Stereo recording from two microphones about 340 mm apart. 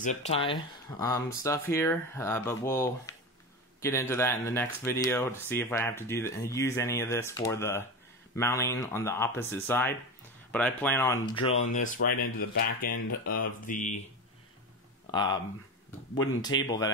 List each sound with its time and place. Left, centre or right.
0.0 s speech: centre
11.1 s speech: centre
15.0 s speech: centre
16.6 s speech: centre